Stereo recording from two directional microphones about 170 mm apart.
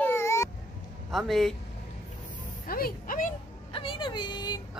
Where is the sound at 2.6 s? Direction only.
60° left (ahead or behind).